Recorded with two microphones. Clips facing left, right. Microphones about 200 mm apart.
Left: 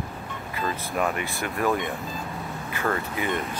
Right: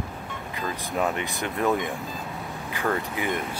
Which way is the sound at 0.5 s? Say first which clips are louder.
Left 1 dB; 20° right (ahead or behind).